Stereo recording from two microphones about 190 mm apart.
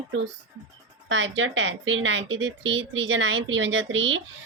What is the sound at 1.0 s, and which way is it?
A woman's voice, 80° right.